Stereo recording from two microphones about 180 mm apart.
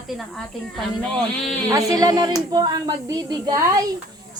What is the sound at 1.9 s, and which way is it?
A woman's voice, 20° right (ahead or behind).